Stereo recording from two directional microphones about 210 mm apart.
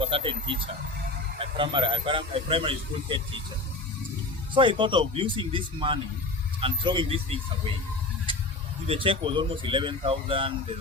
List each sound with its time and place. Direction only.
0.0 s speech: 25° right (ahead or behind)
4.5 s speech: 25° right (ahead or behind)
8.9 s speech: 25° right (ahead or behind)